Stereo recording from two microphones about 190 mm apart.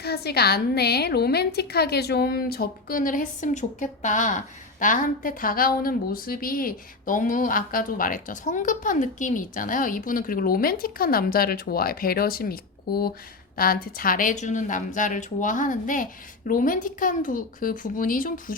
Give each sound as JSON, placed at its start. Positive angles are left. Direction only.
{"t": 0.0, "sound": "a woman's voice", "side_deg": 55}